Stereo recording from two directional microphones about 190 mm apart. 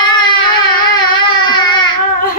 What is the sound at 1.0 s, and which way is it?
Baby cry, 25° left (ahead or behind).